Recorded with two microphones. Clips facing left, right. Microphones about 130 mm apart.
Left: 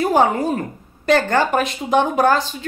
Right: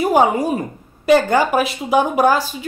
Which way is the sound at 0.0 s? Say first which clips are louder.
Right 1 dB; 10° right (ahead or behind).